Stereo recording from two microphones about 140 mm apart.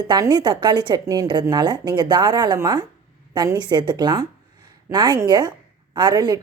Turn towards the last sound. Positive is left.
turn(degrees=-30)  # may be behind; listen again after turning